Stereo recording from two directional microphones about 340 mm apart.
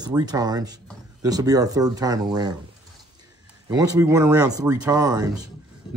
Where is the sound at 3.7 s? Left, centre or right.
Centre.